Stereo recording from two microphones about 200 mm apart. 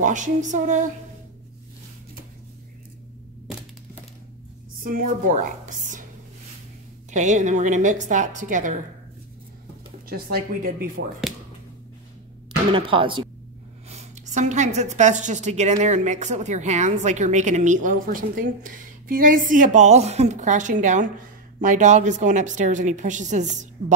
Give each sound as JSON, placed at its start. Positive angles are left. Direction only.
{"t": 0.0, "sound": "a woman's voice", "side_deg": -40}
{"t": 4.8, "sound": "a woman's voice", "side_deg": -45}
{"t": 7.1, "sound": "a woman's voice", "side_deg": -35}
{"t": 10.0, "sound": "speech", "side_deg": -50}
{"t": 12.7, "sound": "a woman's voice", "side_deg": -25}